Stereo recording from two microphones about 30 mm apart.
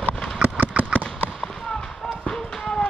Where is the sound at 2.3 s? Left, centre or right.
Centre.